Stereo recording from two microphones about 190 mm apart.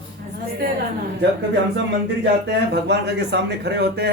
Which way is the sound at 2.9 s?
60° right (ahead or behind).